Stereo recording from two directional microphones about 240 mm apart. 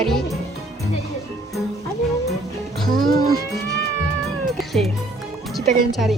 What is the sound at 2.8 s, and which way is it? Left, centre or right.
Music, right.